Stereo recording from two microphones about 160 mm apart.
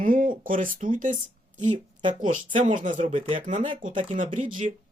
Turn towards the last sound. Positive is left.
turn(degrees=-55)  # may be behind; listen again after turning